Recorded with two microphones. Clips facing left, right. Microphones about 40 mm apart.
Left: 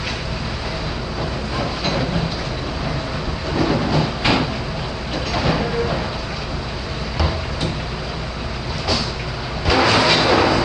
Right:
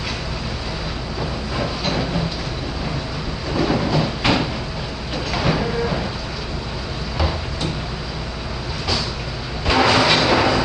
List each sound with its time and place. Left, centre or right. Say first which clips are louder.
1.6 s train: left 1 dB; centre
3.5 s a sound: even; centre
5.3 s train: even; centre
9.7 s vehicle: even; centre